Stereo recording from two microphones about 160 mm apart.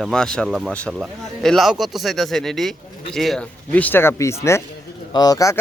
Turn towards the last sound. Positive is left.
turn(degrees=20)  # may be behind; listen again after turning